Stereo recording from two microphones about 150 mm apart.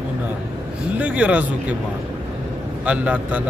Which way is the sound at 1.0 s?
10° right (ahead or behind).